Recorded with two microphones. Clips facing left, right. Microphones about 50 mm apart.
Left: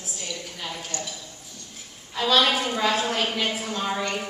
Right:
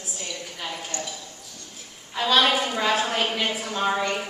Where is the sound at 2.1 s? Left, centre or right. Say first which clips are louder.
Right 1 dB; centre.